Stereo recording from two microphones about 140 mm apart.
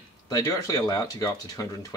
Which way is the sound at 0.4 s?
25° left (ahead or behind).